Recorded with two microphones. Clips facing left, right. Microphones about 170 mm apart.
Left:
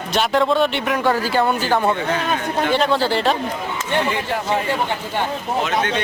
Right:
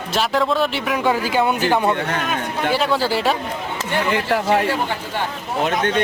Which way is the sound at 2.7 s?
5° right (ahead or behind).